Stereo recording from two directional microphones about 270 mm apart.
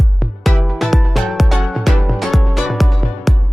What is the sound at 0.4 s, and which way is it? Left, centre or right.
Music, centre.